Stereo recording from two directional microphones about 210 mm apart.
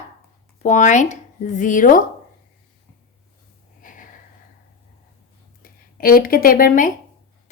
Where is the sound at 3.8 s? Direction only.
40° left (ahead or behind).